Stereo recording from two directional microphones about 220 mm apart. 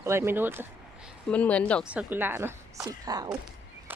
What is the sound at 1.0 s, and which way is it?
Speech, 5° left (ahead or behind).